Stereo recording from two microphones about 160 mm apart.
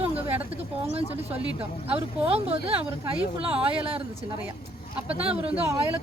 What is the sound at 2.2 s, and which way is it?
Speech, 35° right (ahead or behind).